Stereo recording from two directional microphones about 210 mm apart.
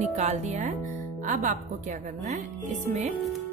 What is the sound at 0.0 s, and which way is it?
Speech, 35° right (ahead or behind).